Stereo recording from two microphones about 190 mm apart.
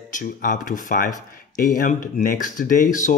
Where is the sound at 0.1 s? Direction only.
45° left (ahead or behind).